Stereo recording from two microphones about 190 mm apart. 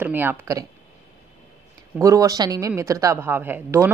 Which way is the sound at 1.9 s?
15° right (ahead or behind).